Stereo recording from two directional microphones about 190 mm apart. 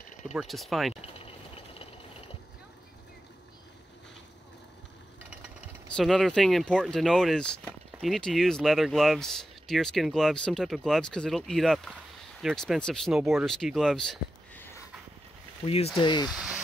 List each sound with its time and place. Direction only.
0.3 s speech: centre (ahead or behind)
5.9 s speech: centre (ahead or behind)
15.6 s speech: 30° left (ahead or behind)
16.3 s a sound: 5° right (ahead or behind)